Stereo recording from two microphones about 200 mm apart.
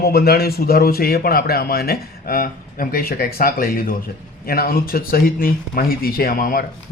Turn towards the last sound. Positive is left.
turn(degrees=45)  # may be behind; listen again after turning